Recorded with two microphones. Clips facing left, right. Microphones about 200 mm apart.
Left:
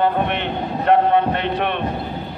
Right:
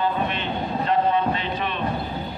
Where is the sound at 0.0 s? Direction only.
65° left (ahead or behind).